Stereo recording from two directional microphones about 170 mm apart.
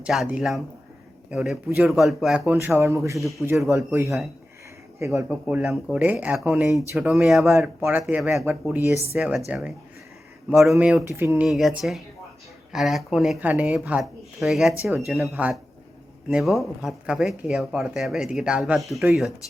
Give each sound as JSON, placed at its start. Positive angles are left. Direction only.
{"t": 0.0, "sound": "speech", "side_deg": -5}
{"t": 2.6, "sound": "speech", "side_deg": -15}
{"t": 3.4, "sound": "speech", "side_deg": -5}
{"t": 4.9, "sound": "speech", "side_deg": -15}
{"t": 8.6, "sound": "speech", "side_deg": -10}
{"t": 11.4, "sound": "speech", "side_deg": 0}